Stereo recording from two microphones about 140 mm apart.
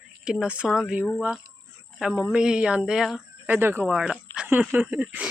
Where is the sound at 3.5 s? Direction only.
15° right (ahead or behind).